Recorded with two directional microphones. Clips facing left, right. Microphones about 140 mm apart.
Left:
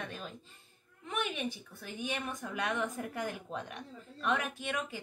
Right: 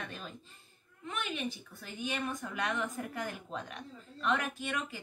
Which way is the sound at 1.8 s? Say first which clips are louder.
Right 1 dB; 15° left (ahead or behind).